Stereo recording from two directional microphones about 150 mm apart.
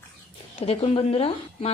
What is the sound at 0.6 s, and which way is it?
A woman's voice, 40° left (ahead or behind).